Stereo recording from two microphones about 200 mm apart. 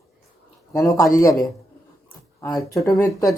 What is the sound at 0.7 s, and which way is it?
Speech, 15° left (ahead or behind).